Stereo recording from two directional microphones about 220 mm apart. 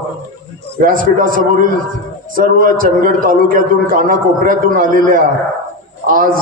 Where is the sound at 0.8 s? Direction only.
40° right (ahead or behind).